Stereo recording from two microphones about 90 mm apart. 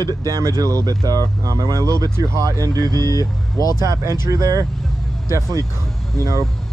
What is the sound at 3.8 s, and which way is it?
Speech, 35° right (ahead or behind).